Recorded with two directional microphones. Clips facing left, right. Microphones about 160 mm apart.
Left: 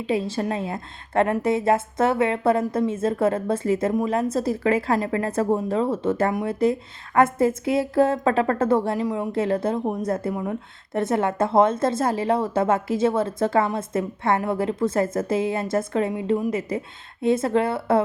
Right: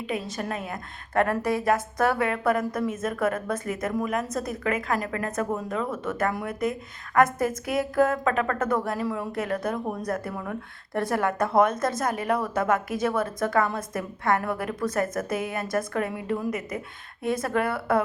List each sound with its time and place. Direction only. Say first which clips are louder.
0.0 s a woman's voice: left 6 dB; 30° left (ahead or behind)